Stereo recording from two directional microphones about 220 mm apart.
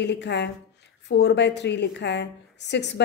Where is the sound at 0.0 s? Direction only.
50° left (ahead or behind).